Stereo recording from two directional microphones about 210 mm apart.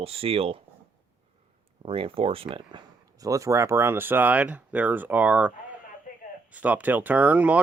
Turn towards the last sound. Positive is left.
turn(degrees=-5)  # may be behind; listen again after turning